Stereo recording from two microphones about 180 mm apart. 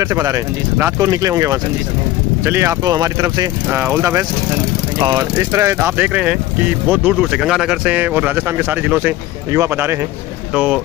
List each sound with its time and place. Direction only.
0.0 s speech: 20° right (ahead or behind)